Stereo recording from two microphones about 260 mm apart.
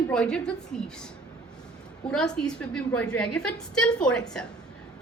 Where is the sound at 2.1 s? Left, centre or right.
Centre.